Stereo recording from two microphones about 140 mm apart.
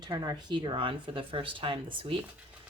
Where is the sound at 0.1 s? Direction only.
30° right (ahead or behind).